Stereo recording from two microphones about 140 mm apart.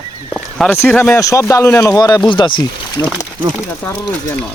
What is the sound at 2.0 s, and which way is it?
Speech, 25° left (ahead or behind).